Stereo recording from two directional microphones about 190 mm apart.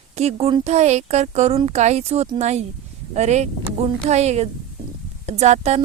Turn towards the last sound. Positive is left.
turn(degrees=-35)  # may be behind; listen again after turning